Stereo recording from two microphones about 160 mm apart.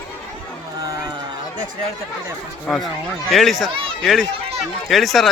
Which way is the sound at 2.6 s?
5° left (ahead or behind).